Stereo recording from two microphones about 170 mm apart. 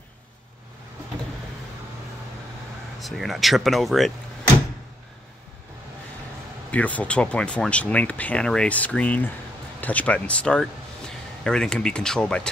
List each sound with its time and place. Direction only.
3.0 s speech: centre (ahead or behind)
6.7 s speech: 10° left (ahead or behind)